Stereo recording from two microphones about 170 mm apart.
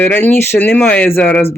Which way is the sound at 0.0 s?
10° left (ahead or behind).